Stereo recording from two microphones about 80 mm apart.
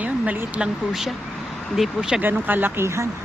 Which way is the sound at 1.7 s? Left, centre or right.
Centre.